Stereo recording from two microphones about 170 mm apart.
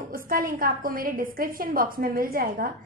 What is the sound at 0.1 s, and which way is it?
A woman's voice, 55° right (ahead or behind).